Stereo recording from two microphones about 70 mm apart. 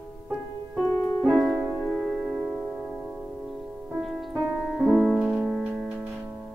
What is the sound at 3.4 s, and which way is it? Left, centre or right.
Music, centre.